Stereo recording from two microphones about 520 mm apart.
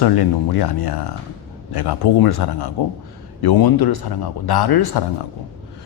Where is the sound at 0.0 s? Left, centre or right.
Left.